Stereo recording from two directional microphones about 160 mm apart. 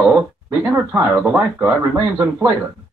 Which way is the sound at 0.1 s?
10° right (ahead or behind).